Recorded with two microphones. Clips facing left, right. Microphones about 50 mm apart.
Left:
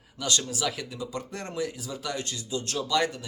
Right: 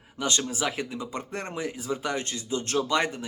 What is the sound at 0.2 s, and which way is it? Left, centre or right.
A man's voice, right.